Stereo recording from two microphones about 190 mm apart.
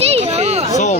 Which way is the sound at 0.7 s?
40° left (ahead or behind).